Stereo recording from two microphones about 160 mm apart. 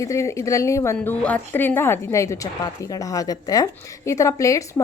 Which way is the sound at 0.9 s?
5° left (ahead or behind).